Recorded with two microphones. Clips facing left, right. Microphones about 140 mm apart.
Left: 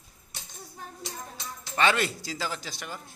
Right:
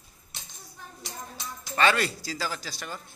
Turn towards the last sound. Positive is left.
turn(degrees=15)  # may be behind; listen again after turning